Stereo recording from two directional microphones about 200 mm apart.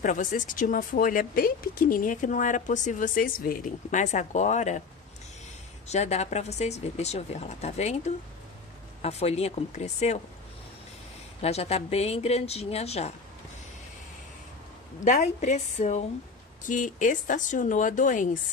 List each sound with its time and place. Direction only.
0.0 s speech: 40° left (ahead or behind)
5.9 s speech: 35° left (ahead or behind)
11.4 s speech: 30° left (ahead or behind)
15.0 s speech: 35° left (ahead or behind)